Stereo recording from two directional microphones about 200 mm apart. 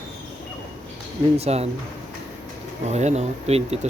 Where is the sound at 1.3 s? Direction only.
30° right (ahead or behind).